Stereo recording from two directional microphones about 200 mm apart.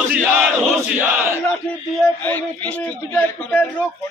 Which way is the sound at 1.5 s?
5° left (ahead or behind).